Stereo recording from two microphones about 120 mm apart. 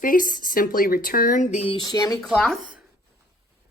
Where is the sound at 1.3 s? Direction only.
90° left.